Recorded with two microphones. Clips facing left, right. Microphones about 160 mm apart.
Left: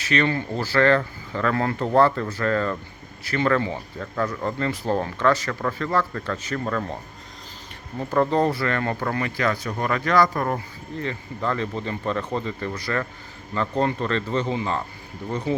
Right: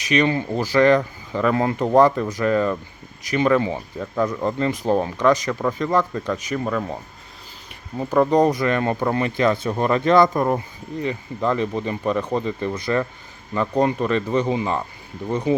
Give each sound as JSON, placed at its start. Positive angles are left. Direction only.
{"t": 0.0, "sound": "speech", "side_deg": -15}